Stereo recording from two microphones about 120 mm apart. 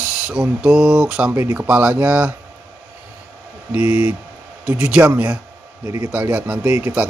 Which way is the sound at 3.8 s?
60° left (ahead or behind).